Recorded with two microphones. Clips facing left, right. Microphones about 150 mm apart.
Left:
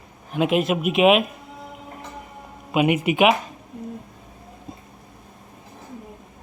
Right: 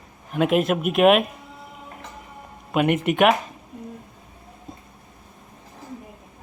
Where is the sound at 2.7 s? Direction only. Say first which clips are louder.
Left 1 dB; 5° left (ahead or behind).